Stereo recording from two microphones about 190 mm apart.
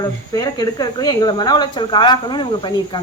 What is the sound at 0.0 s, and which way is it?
A woman's voice, 20° left (ahead or behind).